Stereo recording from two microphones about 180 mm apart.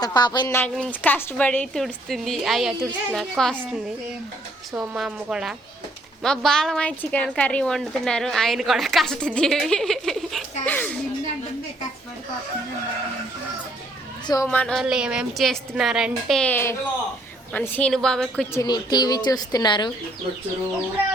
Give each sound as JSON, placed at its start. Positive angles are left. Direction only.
{"t": 0.0, "sound": "a woman's voice", "side_deg": 25}
{"t": 0.5, "sound": "a woman's voice", "side_deg": 10}
{"t": 4.8, "sound": "a woman's voice", "side_deg": -5}
{"t": 14.4, "sound": "a woman's voice", "side_deg": 5}
{"t": 18.5, "sound": "a woman's voice", "side_deg": 20}